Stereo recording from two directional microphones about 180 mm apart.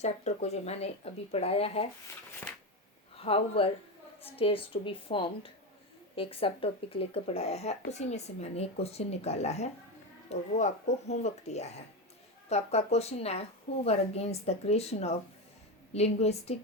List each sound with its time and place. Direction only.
0.0 s a woman's voice: 35° left (ahead or behind)
3.2 s a woman's voice: 30° left (ahead or behind)